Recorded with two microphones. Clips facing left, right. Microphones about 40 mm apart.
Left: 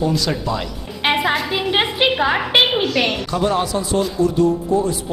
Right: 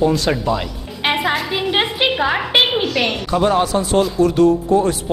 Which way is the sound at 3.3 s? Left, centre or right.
Centre.